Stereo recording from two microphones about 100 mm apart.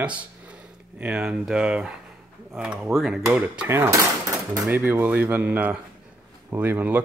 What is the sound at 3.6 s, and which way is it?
Speech, 25° right (ahead or behind).